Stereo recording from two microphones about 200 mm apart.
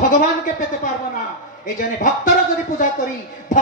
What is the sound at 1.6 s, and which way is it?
A man's voice, 40° left (ahead or behind).